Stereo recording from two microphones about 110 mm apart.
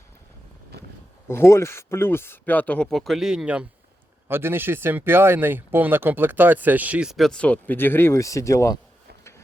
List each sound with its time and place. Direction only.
1.3 s speech: 25° left (ahead or behind)